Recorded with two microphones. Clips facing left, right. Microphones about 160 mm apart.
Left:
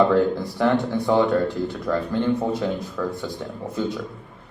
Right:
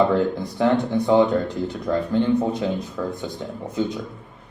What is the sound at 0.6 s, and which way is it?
Speech, 20° right (ahead or behind).